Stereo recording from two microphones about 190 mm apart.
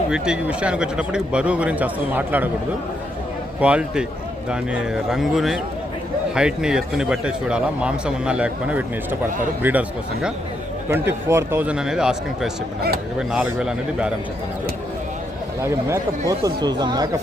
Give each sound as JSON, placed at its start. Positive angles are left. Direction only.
{"t": 0.1, "sound": "speech", "side_deg": -5}
{"t": 3.6, "sound": "a man's voice", "side_deg": -5}
{"t": 10.8, "sound": "a man's voice", "side_deg": -15}
{"t": 16.4, "sound": "speech", "side_deg": -20}